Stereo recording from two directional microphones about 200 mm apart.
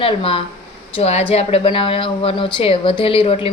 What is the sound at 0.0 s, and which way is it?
A woman's voice, 30° left (ahead or behind).